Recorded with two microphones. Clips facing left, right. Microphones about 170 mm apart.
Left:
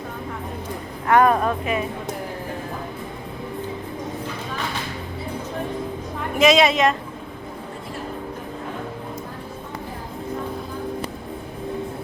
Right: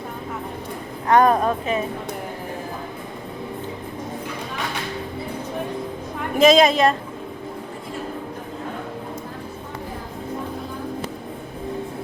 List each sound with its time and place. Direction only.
1.2 s a woman's voice: 35° right (ahead or behind)
6.4 s a woman's voice: 35° right (ahead or behind)